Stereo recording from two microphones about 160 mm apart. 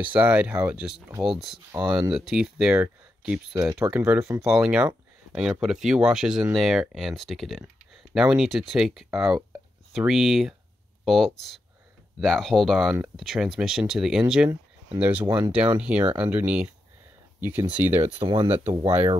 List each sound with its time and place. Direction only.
0.0 s speech: 10° right (ahead or behind)
3.5 s speech: 20° right (ahead or behind)
4.5 s speech: 5° right (ahead or behind)
15.2 s speech: 20° right (ahead or behind)
15.8 s speech: 10° right (ahead or behind)
18.2 s speech: 35° right (ahead or behind)
18.5 s speech: 10° right (ahead or behind)